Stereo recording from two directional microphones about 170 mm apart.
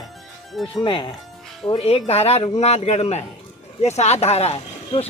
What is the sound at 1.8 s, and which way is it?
Speech, 35° left (ahead or behind).